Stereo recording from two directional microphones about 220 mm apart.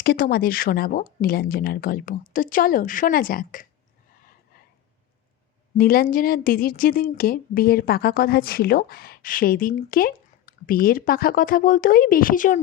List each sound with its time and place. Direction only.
0.0 s speech: 45° left (ahead or behind)
5.7 s speech: 40° left (ahead or behind)